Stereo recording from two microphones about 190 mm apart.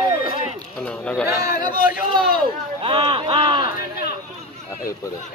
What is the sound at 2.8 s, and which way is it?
Speech, 25° right (ahead or behind).